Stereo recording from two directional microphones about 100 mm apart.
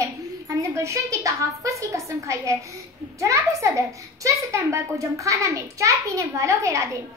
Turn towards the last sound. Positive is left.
turn(degrees=-30)  # may be behind; listen again after turning